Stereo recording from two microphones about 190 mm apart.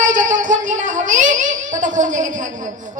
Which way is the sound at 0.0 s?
40° right (ahead or behind).